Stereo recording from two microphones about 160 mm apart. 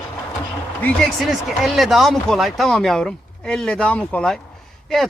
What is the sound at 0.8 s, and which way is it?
Speech, 5° left (ahead or behind).